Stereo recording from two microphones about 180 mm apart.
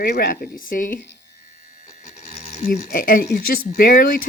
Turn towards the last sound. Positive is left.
turn(degrees=55)  # may be behind; listen again after turning